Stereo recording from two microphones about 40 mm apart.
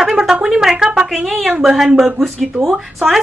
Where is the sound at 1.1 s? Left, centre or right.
Centre.